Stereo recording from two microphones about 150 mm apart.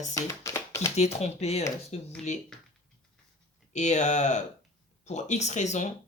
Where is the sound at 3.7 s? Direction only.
50° left (ahead or behind).